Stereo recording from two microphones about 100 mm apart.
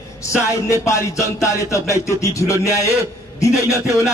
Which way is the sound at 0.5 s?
30° left (ahead or behind).